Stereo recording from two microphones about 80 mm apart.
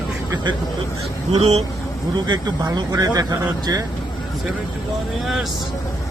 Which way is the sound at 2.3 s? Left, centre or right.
Right.